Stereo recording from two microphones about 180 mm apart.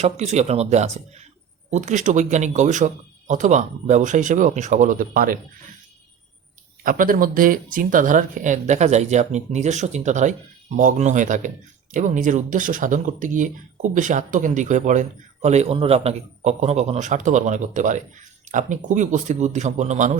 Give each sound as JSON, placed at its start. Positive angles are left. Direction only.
{"t": 0.0, "sound": "speech", "side_deg": -40}
{"t": 6.8, "sound": "speech", "side_deg": -50}